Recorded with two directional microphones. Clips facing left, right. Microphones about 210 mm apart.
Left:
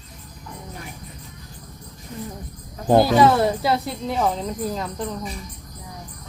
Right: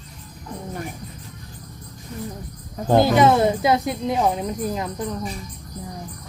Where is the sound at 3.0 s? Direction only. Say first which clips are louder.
Right 2 dB; 20° right (ahead or behind).